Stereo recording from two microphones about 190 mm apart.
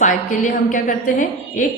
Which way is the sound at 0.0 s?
40° left (ahead or behind).